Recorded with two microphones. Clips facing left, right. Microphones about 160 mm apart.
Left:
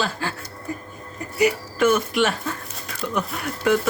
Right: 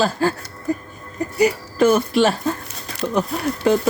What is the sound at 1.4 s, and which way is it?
Speech, 35° right (ahead or behind).